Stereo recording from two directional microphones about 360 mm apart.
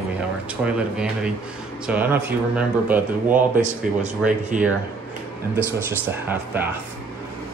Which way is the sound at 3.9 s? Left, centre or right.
Right.